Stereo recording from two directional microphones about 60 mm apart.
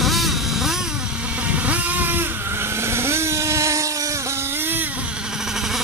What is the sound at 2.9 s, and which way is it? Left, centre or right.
Vehicle, right.